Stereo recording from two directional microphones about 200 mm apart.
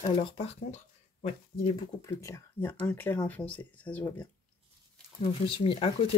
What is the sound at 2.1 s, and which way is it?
Speech, 15° left (ahead or behind).